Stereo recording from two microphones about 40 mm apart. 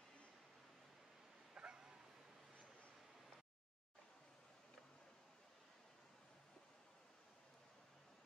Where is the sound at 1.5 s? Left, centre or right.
Right.